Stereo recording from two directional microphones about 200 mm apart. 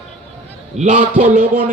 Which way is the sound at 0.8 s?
40° right (ahead or behind).